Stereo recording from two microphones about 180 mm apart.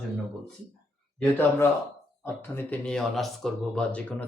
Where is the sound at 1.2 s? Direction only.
10° left (ahead or behind).